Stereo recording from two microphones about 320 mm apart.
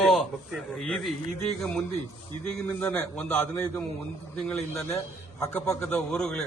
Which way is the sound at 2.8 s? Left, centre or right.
Centre.